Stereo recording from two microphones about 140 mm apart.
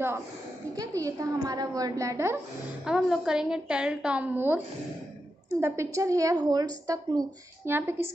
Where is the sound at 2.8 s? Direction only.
5° right (ahead or behind).